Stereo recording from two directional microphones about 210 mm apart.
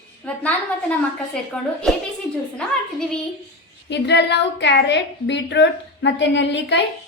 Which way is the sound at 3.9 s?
55° left (ahead or behind).